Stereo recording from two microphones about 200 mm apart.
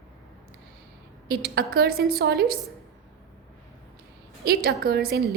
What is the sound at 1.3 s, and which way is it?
A woman's voice, 50° right (ahead or behind).